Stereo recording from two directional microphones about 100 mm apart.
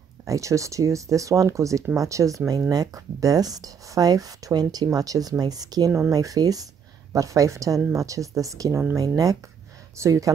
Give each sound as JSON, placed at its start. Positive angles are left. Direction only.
{"t": 0.3, "sound": "speech", "side_deg": -30}